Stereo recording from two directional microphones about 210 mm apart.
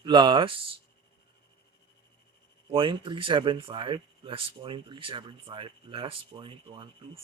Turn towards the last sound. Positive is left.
turn(degrees=-25)  # may be behind; listen again after turning